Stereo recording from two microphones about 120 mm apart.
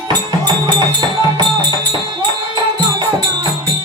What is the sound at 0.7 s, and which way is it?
Music, 40° right (ahead or behind).